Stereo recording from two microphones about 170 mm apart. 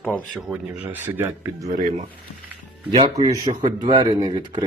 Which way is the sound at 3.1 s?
25° right (ahead or behind).